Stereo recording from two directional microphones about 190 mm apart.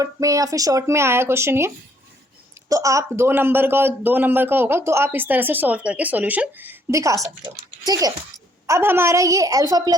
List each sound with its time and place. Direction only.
0.0 s speech: 15° right (ahead or behind)